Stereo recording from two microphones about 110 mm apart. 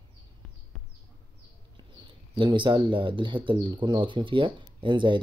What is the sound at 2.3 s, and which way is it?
Speech, 45° right (ahead or behind).